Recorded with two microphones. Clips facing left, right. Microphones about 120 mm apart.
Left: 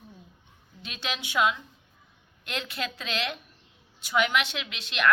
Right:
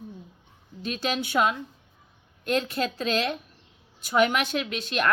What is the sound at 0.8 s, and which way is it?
A woman's voice, 40° right (ahead or behind).